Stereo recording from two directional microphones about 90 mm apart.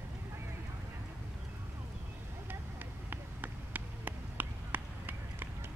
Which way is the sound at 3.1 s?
20° right (ahead or behind).